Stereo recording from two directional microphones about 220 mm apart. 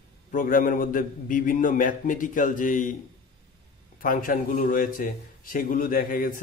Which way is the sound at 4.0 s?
40° left (ahead or behind).